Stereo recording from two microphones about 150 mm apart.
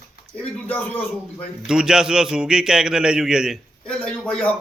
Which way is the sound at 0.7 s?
10° left (ahead or behind).